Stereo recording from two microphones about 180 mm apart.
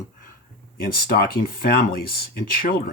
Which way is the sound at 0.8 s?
55° left (ahead or behind).